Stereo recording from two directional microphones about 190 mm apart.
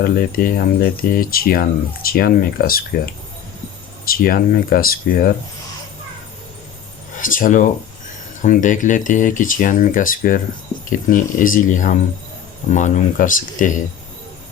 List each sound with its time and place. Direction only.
0.0 s speech: 50° left (ahead or behind)
4.0 s speech: 50° left (ahead or behind)
7.2 s speech: 45° left (ahead or behind)